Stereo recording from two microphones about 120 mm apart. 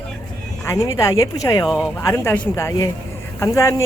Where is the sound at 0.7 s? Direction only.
25° left (ahead or behind).